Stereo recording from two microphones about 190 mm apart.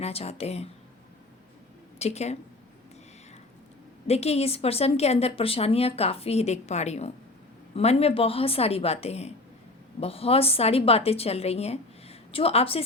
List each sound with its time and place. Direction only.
0.0 s a woman's voice: 30° left (ahead or behind)
2.0 s a woman's voice: 35° left (ahead or behind)
4.0 s a woman's voice: 35° left (ahead or behind)